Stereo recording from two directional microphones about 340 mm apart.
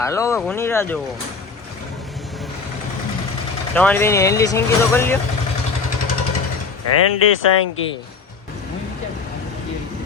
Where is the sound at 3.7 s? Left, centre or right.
Centre.